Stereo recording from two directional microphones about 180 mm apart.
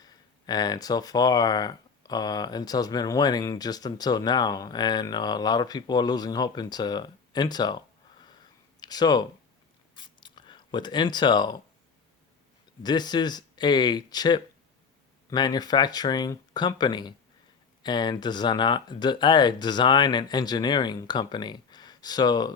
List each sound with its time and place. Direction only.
0.0 s speech: 20° left (ahead or behind)
9.9 s a sound: 25° left (ahead or behind)
12.8 s speech: 25° left (ahead or behind)